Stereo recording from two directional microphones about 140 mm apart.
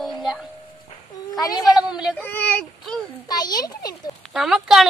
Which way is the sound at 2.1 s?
10° left (ahead or behind).